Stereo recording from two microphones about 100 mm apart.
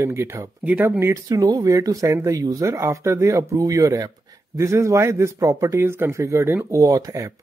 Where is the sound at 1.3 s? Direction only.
40° right (ahead or behind).